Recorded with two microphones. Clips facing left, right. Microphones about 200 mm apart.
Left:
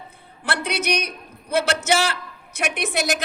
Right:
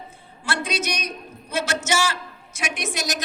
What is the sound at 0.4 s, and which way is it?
A woman's voice, 60° left (ahead or behind).